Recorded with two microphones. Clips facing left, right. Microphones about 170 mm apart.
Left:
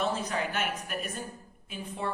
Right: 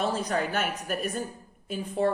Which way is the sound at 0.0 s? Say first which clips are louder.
Right 3 dB; 40° right (ahead or behind).